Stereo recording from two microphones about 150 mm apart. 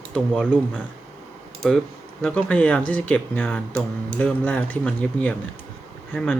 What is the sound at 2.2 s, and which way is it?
Speech, 5° left (ahead or behind).